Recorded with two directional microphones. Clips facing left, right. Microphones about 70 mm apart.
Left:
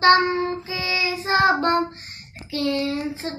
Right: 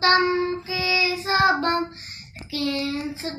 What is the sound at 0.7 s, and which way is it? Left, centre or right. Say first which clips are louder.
Child singing: right 1 dB; left.